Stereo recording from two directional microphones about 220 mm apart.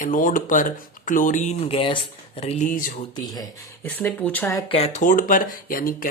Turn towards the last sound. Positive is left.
turn(degrees=40)  # may be behind; listen again after turning